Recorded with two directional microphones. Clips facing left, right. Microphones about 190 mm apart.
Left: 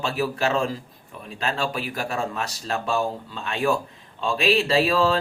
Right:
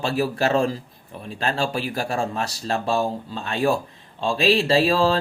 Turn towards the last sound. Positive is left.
turn(degrees=-35)  # may be behind; listen again after turning